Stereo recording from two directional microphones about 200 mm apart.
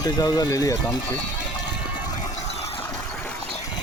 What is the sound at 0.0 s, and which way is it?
Speech, 20° left (ahead or behind).